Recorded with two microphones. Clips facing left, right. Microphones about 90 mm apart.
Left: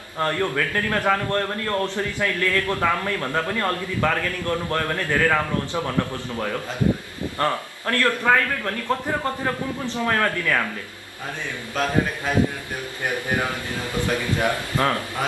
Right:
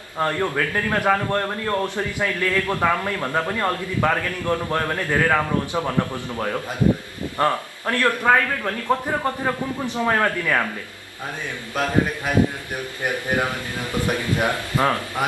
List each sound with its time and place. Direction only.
0.2 s a man's voice: 15° right (ahead or behind)
11.7 s a man's voice: 15° right (ahead or behind)